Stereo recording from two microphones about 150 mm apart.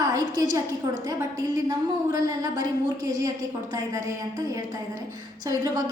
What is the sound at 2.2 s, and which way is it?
Speech, 25° right (ahead or behind).